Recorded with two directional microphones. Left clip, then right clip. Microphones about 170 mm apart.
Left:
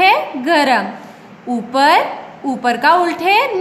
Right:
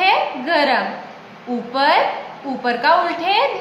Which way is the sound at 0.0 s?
65° left (ahead or behind).